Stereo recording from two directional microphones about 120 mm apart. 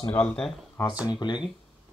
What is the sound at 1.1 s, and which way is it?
Speech, 40° left (ahead or behind).